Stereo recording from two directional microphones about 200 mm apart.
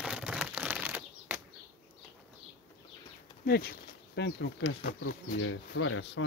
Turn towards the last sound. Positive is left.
turn(degrees=70)  # may be behind; listen again after turning